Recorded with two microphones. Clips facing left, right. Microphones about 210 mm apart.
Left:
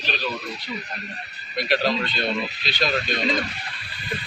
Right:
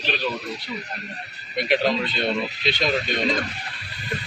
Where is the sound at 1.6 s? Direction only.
20° right (ahead or behind).